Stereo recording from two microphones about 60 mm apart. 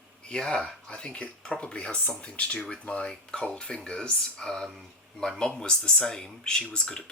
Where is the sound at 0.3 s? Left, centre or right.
Centre.